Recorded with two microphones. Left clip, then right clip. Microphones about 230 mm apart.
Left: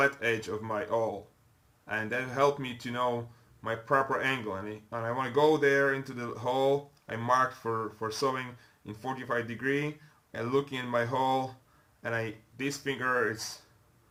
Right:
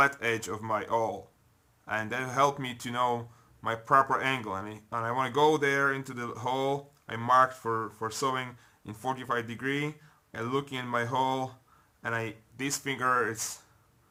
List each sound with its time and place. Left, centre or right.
0.0 s speech: right